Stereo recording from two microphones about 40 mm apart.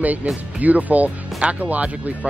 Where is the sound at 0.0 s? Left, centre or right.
Right.